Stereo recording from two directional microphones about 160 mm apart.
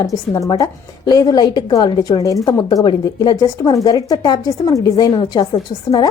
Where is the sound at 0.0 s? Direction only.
20° left (ahead or behind).